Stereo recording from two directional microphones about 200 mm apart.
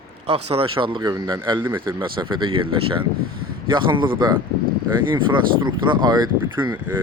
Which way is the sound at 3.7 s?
25° right (ahead or behind).